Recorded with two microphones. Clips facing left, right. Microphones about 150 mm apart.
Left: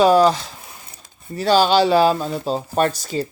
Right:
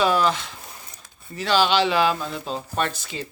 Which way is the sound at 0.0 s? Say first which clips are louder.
Left 7 dB; 40° left (ahead or behind).